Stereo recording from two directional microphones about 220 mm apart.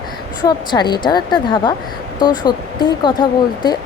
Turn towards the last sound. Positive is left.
turn(degrees=20)  # may be behind; listen again after turning